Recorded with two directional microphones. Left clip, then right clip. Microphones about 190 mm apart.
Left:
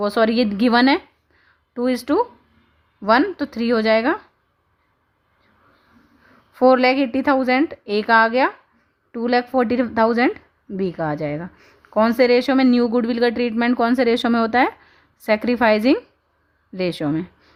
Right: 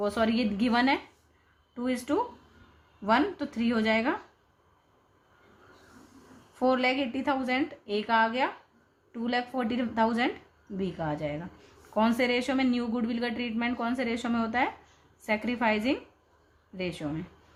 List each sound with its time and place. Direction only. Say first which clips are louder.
0.0 s speech: left 10 dB; 55° left (ahead or behind)
6.6 s a woman's voice: left 12 dB; 55° left (ahead or behind)